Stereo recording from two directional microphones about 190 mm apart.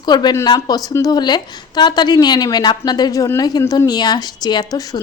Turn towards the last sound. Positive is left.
turn(degrees=20)  # may be behind; listen again after turning